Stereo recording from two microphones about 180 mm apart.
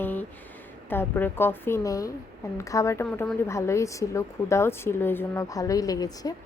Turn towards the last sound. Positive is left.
turn(degrees=20)  # may be behind; listen again after turning